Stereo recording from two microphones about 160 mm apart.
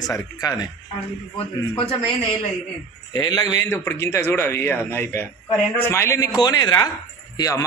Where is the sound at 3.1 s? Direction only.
25° left (ahead or behind).